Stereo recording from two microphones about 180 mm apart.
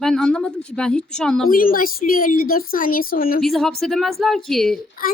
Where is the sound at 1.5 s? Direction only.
50° left (ahead or behind).